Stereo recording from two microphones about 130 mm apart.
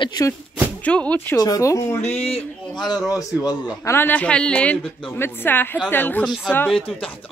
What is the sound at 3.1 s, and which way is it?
A woman's voice, 25° left (ahead or behind).